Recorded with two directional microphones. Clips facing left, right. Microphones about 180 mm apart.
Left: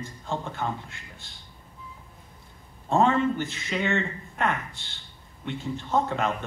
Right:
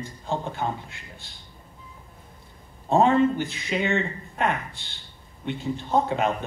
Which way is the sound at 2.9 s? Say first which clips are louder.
Right 3 dB; 35° right (ahead or behind).